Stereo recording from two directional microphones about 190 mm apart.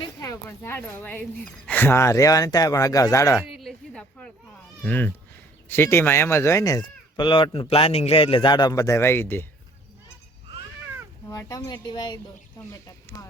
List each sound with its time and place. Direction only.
0.2 s speech: 15° left (ahead or behind)
3.5 s a sound: centre (ahead or behind)
4.8 s speech: 10° left (ahead or behind)
11.3 s speech: 15° left (ahead or behind)